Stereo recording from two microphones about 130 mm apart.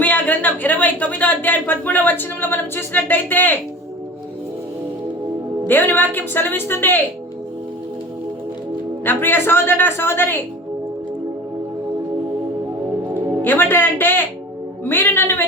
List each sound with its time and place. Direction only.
0.0 s a sound: 10° left (ahead or behind)
5.6 s a woman's voice: 15° left (ahead or behind)
9.0 s a woman's voice: 15° left (ahead or behind)
13.4 s a woman's voice: 15° left (ahead or behind)